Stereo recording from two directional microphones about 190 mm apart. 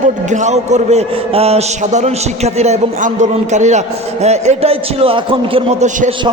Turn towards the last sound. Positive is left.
turn(degrees=-40)  # may be behind; listen again after turning